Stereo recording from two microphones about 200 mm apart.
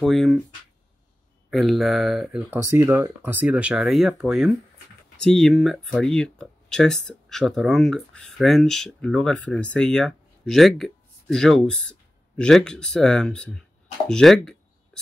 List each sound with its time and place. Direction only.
0.0 s speech: centre (ahead or behind)
1.5 s speech: centre (ahead or behind)